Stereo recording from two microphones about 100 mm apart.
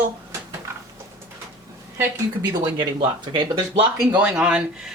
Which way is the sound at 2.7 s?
50° right (ahead or behind).